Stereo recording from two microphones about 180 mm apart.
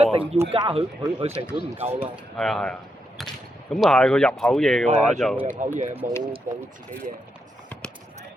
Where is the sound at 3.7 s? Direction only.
5° left (ahead or behind).